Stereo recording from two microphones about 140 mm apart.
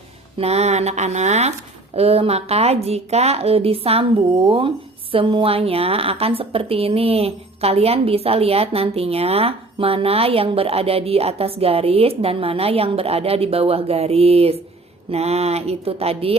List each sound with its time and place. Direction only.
0.3 s a woman's voice: 50° right (ahead or behind)